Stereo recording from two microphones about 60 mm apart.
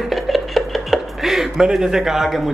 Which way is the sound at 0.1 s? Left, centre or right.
Centre.